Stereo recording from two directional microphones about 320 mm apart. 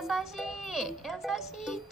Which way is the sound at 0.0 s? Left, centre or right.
Centre.